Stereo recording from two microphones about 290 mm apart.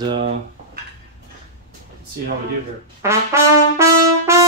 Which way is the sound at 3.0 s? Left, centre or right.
Centre.